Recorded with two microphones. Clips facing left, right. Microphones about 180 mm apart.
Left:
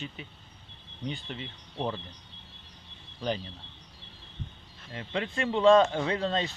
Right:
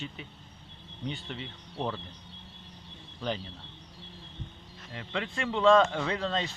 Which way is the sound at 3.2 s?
15° left (ahead or behind).